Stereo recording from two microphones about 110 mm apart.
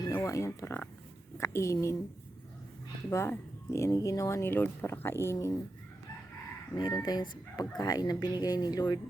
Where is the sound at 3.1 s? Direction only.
25° left (ahead or behind).